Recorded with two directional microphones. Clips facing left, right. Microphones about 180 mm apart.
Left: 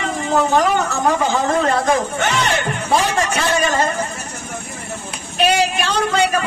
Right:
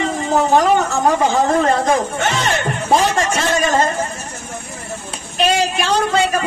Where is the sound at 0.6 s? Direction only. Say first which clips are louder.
Right 2 dB; 35° right (ahead or behind).